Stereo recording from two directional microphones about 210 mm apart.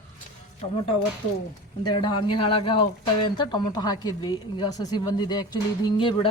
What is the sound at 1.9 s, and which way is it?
A woman's voice, 20° left (ahead or behind).